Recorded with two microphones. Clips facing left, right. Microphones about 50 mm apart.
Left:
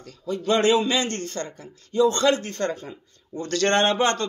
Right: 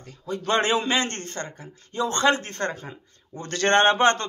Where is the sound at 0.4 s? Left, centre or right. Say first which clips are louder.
Left 3 dB; right.